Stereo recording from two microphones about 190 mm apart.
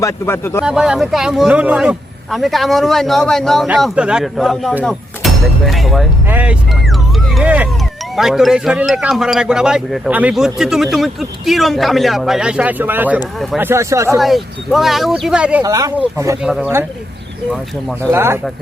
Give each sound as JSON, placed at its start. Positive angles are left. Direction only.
{"t": 0.0, "sound": "speech", "side_deg": 15}
{"t": 0.6, "sound": "speech", "side_deg": -5}
{"t": 14.2, "sound": "speech", "side_deg": 0}
{"t": 15.6, "sound": "speech", "side_deg": -20}
{"t": 16.4, "sound": "speech", "side_deg": -5}